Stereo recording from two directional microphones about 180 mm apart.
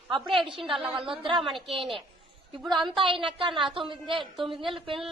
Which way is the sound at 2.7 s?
Centre (ahead or behind).